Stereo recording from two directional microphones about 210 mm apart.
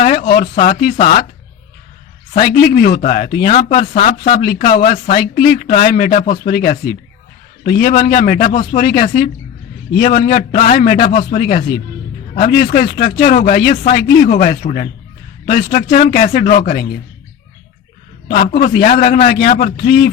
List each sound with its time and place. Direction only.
0.0 s speech: 45° left (ahead or behind)
2.3 s speech: 45° left (ahead or behind)
18.3 s speech: 40° left (ahead or behind)